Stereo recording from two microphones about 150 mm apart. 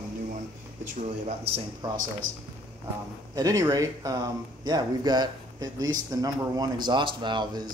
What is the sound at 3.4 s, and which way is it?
Speech, 25° right (ahead or behind).